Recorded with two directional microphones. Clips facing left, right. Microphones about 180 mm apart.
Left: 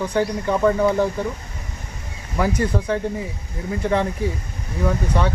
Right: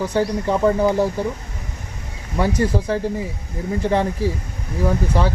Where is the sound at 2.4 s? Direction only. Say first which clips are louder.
Right 1 dB; 30° right (ahead or behind).